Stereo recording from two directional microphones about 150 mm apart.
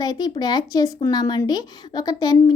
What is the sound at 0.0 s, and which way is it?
Speech, 25° left (ahead or behind).